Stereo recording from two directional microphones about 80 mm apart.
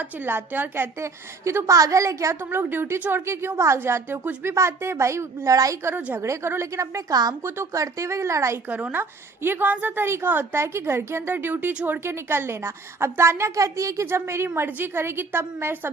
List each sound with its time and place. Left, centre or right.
0.0 s a woman's voice: right
2.4 s a woman's voice: right
8.7 s a woman's voice: right